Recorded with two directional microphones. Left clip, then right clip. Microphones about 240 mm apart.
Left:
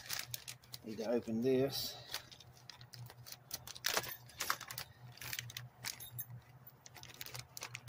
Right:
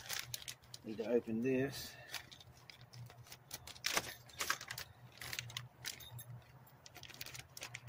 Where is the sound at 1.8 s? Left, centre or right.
Centre.